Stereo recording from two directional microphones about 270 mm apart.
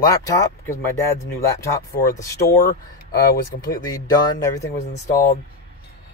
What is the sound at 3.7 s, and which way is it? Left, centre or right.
Speech, centre.